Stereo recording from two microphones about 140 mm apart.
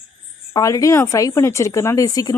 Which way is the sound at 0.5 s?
25° left (ahead or behind).